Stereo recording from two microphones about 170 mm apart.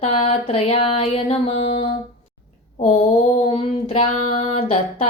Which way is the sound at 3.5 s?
35° left (ahead or behind).